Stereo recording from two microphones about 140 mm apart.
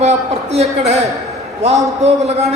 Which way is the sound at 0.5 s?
50° right (ahead or behind).